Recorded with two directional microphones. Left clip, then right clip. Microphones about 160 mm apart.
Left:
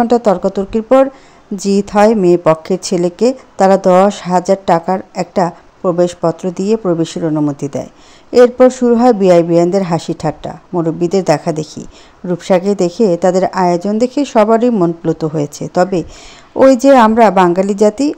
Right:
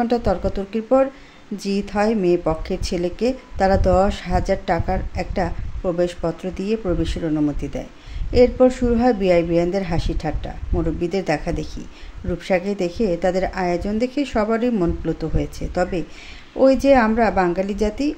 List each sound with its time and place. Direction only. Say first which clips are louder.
0.0 s speech: left 9 dB; 40° left (ahead or behind)
1.6 s speech: left 11 dB; 40° left (ahead or behind)